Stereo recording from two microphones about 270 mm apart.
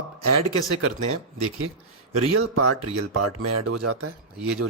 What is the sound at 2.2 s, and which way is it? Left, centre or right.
Speech, right.